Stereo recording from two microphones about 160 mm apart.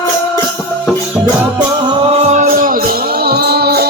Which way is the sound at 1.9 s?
35° right (ahead or behind).